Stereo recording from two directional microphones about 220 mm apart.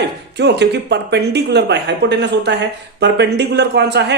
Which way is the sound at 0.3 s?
50° right (ahead or behind).